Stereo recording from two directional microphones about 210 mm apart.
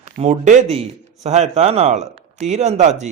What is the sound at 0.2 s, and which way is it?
Speech, 35° right (ahead or behind).